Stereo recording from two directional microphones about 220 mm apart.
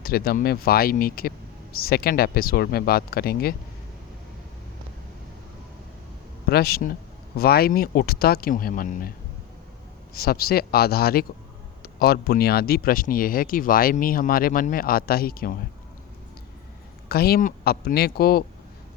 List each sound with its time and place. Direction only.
0.0 s speech: 45° left (ahead or behind)
6.5 s speech: 45° left (ahead or behind)
10.2 s speech: 45° left (ahead or behind)
17.1 s speech: 45° left (ahead or behind)